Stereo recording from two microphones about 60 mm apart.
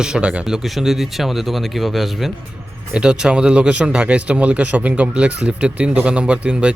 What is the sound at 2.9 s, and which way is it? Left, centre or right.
Speech, centre.